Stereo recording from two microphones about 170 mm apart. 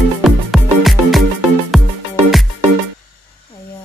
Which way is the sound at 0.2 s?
Centre (ahead or behind).